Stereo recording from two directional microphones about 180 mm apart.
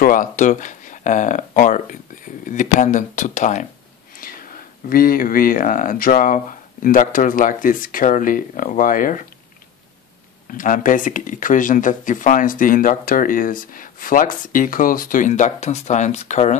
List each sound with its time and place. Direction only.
0.0 s speech: 50° left (ahead or behind)
4.8 s speech: 55° left (ahead or behind)
10.5 s speech: 50° left (ahead or behind)